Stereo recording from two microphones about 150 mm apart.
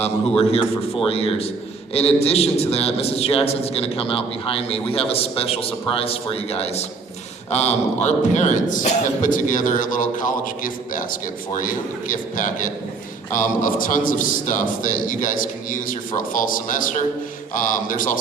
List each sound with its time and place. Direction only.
0.0 s a man's voice: 40° left (ahead or behind); by 18.2 s 65° left (ahead or behind)